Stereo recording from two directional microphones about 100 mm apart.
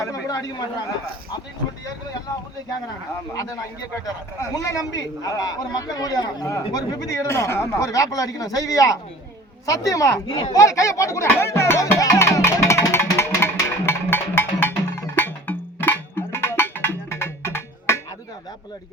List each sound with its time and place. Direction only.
0.0 s a man's voice: 35° left (ahead or behind)
4.0 s a man's voice: 35° left (ahead or behind)
10.2 s speech: 55° left (ahead or behind)
10.5 s music: 35° left (ahead or behind)
15.1 s a sound: 20° left (ahead or behind)